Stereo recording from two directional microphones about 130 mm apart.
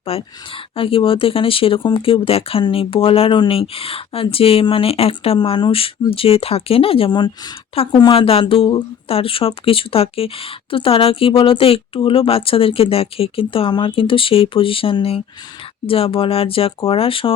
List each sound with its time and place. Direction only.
0.0 s speech: 45° left (ahead or behind)